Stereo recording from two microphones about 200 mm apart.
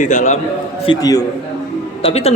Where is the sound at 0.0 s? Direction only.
35° left (ahead or behind).